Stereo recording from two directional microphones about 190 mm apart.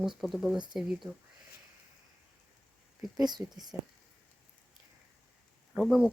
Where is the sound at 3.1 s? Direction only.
20° right (ahead or behind).